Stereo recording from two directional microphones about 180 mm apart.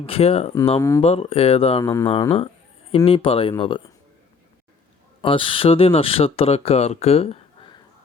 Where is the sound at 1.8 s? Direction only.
15° left (ahead or behind).